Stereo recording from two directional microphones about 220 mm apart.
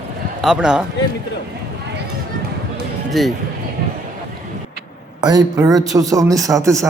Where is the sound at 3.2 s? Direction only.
Centre (ahead or behind).